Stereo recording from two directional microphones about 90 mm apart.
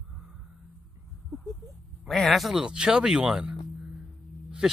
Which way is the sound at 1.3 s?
Centre (ahead or behind).